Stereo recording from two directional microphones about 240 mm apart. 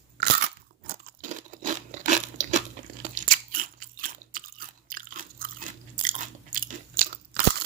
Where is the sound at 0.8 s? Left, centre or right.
Right.